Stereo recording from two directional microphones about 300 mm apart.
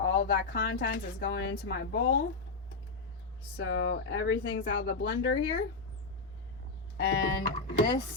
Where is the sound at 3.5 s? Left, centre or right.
Left.